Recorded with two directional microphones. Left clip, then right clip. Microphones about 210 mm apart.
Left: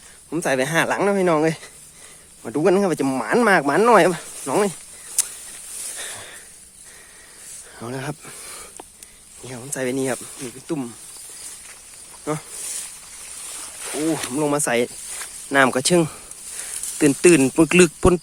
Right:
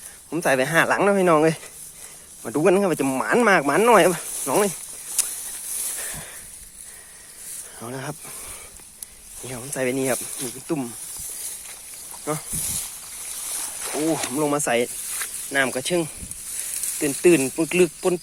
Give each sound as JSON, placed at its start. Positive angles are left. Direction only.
{"t": 0.3, "sound": "speech", "side_deg": 20}
{"t": 6.0, "sound": "a sound", "side_deg": 30}
{"t": 7.8, "sound": "speech", "side_deg": 30}
{"t": 9.4, "sound": "speech", "side_deg": 10}
{"t": 12.2, "sound": "speech", "side_deg": 25}
{"t": 14.3, "sound": "speech", "side_deg": 25}